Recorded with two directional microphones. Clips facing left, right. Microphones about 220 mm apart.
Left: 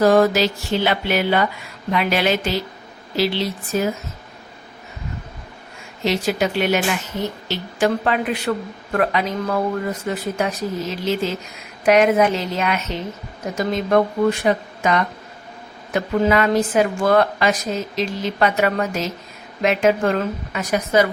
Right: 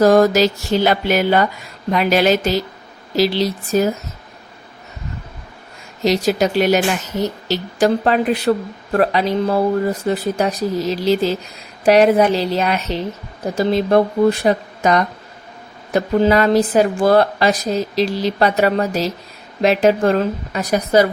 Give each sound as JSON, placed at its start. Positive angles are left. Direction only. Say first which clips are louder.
{"t": 0.0, "sound": "speech", "louder": "right 3 dB", "side_deg": -40}
{"t": 6.0, "sound": "speech", "louder": "right 4 dB", "side_deg": -40}